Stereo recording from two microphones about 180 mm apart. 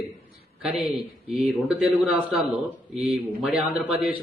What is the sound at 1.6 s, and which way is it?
A man's voice, 10° right (ahead or behind).